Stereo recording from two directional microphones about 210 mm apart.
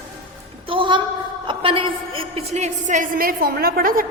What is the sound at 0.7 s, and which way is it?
A woman's voice, 25° right (ahead or behind).